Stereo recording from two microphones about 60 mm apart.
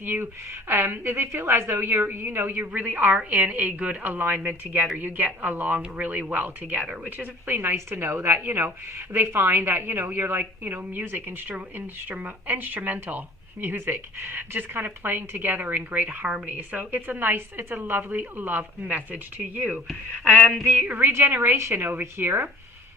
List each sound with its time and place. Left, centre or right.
0.0 s a woman's voice: right
20.4 s a sound: centre
21.0 s a woman's voice: right
21.8 s a woman's voice: right